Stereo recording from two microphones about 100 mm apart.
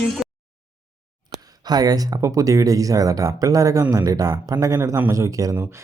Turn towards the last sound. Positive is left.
turn(degrees=-35)  # may be behind; listen again after turning